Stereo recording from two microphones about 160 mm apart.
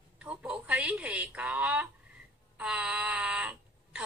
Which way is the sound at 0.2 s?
10° right (ahead or behind).